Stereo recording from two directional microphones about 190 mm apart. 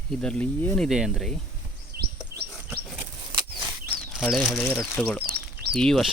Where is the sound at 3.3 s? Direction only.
20° right (ahead or behind).